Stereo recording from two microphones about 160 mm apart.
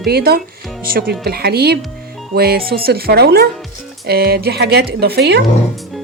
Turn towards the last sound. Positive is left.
turn(degrees=-90)